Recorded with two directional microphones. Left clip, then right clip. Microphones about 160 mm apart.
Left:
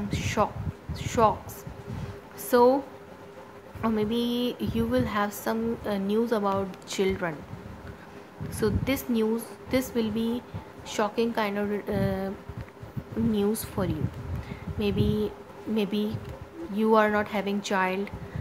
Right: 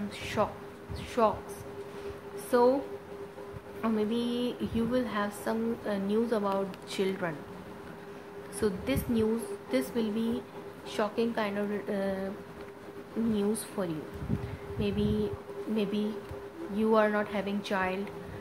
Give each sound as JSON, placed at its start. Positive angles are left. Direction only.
{"t": 0.1, "sound": "a woman's voice", "side_deg": 20}
{"t": 2.5, "sound": "a woman's voice", "side_deg": 25}
{"t": 3.8, "sound": "a woman's voice", "side_deg": 20}
{"t": 8.5, "sound": "a woman's voice", "side_deg": 20}
{"t": 13.3, "sound": "a woman's voice", "side_deg": 20}